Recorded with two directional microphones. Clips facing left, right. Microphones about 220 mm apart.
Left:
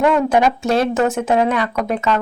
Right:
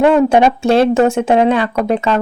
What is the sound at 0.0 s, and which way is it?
A woman's voice, 30° right (ahead or behind).